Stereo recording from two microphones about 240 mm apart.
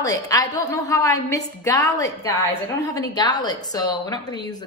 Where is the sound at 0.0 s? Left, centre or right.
Centre.